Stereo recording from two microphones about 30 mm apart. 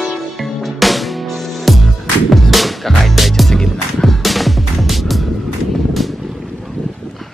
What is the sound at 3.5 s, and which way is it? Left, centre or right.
Music, left.